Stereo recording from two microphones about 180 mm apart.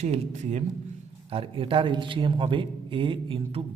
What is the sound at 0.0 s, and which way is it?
A man's voice, 40° right (ahead or behind).